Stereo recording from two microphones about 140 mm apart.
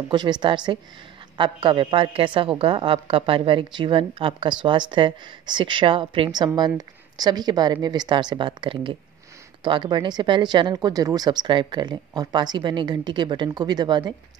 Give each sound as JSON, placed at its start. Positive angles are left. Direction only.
{"t": 0.1, "sound": "speech", "side_deg": -30}